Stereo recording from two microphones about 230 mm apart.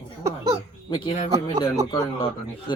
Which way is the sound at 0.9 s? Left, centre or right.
Left.